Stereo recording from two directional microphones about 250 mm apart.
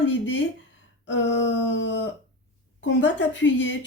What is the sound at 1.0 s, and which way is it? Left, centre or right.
A woman's voice, left.